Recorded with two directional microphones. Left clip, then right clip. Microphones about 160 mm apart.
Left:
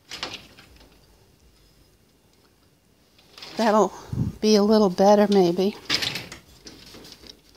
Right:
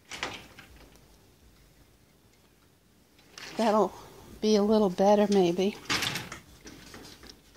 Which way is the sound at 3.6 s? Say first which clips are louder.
Left 5 dB; 30° left (ahead or behind).